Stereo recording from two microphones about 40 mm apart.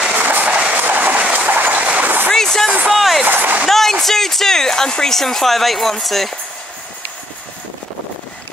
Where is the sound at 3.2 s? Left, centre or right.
Right.